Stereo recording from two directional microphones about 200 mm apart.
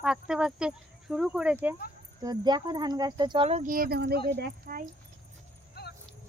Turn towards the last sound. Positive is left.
turn(degrees=55)  # may be behind; listen again after turning